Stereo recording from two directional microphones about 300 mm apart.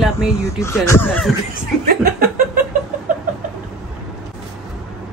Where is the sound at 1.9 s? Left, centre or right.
Right.